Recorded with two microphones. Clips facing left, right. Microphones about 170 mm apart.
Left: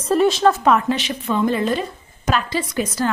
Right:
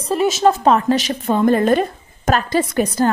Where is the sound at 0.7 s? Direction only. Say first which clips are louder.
Right 4 dB; 40° right (ahead or behind).